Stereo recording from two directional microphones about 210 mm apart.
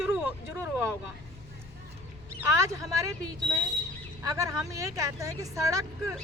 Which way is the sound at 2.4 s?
15° right (ahead or behind).